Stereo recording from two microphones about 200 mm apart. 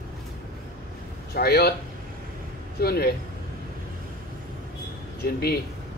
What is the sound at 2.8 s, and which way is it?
Speech, 50° left (ahead or behind).